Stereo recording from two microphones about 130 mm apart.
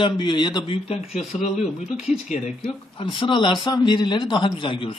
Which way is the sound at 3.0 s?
40° left (ahead or behind).